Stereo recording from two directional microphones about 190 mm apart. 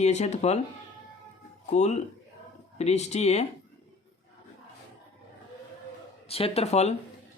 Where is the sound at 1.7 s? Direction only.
35° left (ahead or behind).